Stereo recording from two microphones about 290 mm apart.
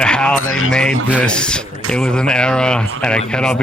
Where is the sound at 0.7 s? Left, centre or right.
Centre.